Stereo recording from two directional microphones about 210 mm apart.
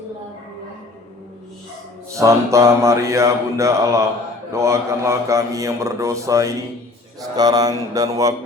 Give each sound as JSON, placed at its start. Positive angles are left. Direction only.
{"t": 2.1, "sound": "a man's voice", "side_deg": -15}